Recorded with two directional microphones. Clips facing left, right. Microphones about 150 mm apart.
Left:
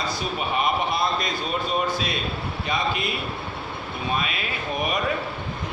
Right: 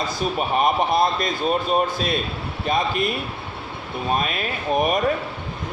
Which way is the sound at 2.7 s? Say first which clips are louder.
Right 5 dB; 50° right (ahead or behind).